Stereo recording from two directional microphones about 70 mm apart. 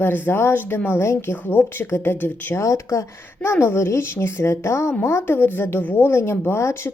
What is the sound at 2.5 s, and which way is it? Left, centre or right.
A woman's voice, left.